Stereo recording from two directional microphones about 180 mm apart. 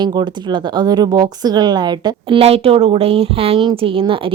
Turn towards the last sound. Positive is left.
turn(degrees=-30)  # may be behind; listen again after turning